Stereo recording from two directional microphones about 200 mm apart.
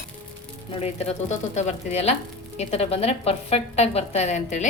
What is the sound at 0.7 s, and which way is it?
A woman's voice, 30° left (ahead or behind).